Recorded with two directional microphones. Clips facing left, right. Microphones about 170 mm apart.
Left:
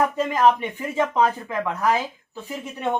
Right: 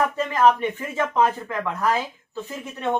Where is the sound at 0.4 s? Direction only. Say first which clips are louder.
Right 2 dB; 15° left (ahead or behind).